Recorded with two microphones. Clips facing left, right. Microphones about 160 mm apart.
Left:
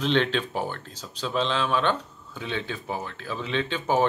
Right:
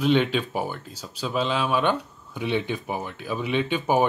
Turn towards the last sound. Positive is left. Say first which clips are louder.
# right 2 dB
turn(degrees=-10)  # may be behind; listen again after turning